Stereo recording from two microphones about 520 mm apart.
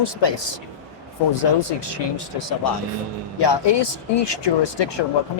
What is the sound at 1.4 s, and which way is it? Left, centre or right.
Speech, left.